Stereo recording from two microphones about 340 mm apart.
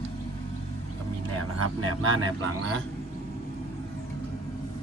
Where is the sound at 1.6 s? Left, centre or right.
Right.